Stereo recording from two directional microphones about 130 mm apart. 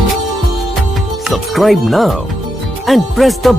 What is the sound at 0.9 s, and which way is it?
Speech, centre (ahead or behind).